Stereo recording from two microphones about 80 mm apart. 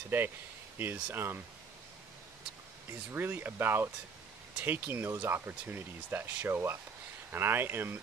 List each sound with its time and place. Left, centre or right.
0.7 s speech: right
2.9 s speech: right